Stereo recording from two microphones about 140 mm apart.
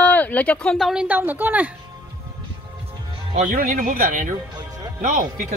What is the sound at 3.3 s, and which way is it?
Speech, 55° right (ahead or behind).